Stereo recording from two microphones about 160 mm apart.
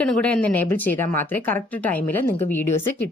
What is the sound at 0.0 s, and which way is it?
A woman's voice, 5° left (ahead or behind).